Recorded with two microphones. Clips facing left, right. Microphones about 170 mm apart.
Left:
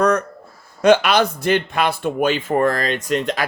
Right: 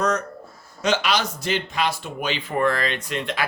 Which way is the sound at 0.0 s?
55° left (ahead or behind).